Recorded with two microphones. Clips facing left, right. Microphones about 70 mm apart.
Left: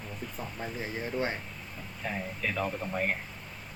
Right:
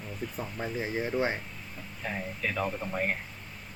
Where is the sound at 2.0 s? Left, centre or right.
Centre.